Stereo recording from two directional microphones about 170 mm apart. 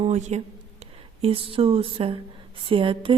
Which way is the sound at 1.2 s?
30° right (ahead or behind).